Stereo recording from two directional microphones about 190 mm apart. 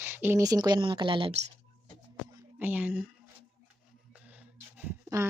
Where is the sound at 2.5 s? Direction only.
10° right (ahead or behind).